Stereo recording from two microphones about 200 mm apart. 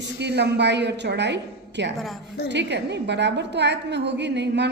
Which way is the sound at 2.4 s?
60° right (ahead or behind).